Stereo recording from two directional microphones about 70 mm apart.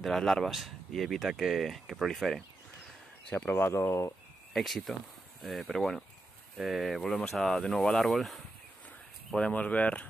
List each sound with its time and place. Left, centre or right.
0.0 s speech: centre
3.3 s speech: left
4.6 s speech: centre
9.5 s speech: left